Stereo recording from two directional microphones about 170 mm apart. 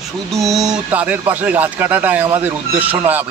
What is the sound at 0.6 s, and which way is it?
Speech, 10° right (ahead or behind).